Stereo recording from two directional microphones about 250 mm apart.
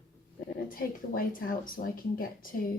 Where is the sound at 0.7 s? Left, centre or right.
Left.